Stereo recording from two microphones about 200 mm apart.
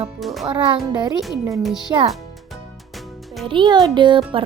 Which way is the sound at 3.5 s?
25° right (ahead or behind).